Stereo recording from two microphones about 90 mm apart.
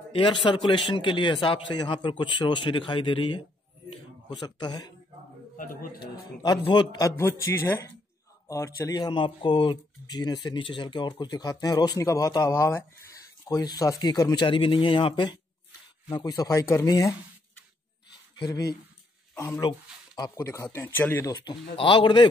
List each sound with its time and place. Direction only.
0.5 s speech: 65° left (ahead or behind)
4.3 s a man's voice: 55° left (ahead or behind)
6.7 s a man's voice: 55° left (ahead or behind)
7.1 s a man's voice: 30° left (ahead or behind)
8.9 s speech: 60° left (ahead or behind)
12.0 s a man's voice: 35° left (ahead or behind)
14.4 s speech: 70° left (ahead or behind)
16.1 s a man's voice: 50° left (ahead or behind)
18.4 s a man's voice: 40° left (ahead or behind)
20.7 s a man's voice: 25° left (ahead or behind)
21.7 s speech: 65° left (ahead or behind)